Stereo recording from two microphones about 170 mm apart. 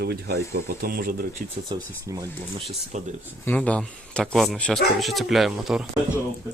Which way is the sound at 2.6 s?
35° right (ahead or behind).